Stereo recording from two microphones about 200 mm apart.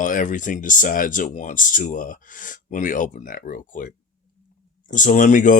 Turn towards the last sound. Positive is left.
turn(degrees=40)  # may be behind; listen again after turning